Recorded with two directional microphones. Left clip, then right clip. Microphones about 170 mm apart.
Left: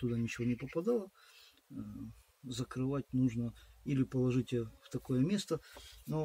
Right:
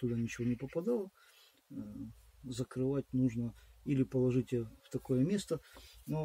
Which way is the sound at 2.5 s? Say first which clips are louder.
Right 2 dB; 25° left (ahead or behind).